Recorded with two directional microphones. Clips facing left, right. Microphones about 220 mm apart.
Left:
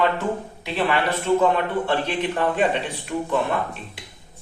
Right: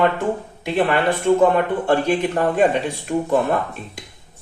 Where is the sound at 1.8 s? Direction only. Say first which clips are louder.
Right 5 dB; 45° right (ahead or behind).